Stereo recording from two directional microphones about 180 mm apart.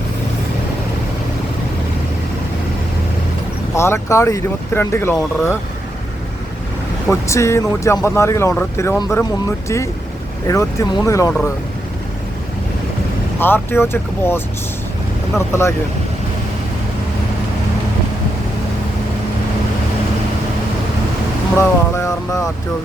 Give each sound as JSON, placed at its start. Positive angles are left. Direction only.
{"t": 3.8, "sound": "speech", "side_deg": 15}
{"t": 7.1, "sound": "speech", "side_deg": 15}
{"t": 13.4, "sound": "speech", "side_deg": 10}
{"t": 21.6, "sound": "a sound", "side_deg": 15}